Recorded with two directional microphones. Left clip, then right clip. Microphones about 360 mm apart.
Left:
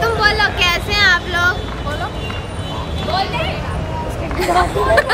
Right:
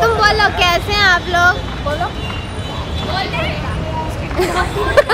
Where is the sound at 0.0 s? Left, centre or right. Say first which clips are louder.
Right 2 dB; centre.